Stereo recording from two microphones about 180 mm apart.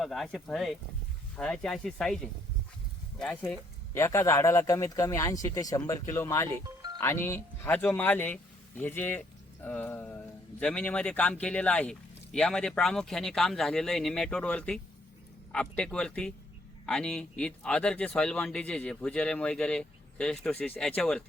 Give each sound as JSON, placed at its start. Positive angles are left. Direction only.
{"t": 0.0, "sound": "speech", "side_deg": 0}
{"t": 3.9, "sound": "speech", "side_deg": 15}